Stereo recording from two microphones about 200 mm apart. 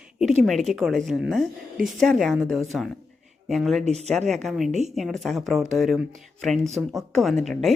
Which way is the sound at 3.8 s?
35° right (ahead or behind).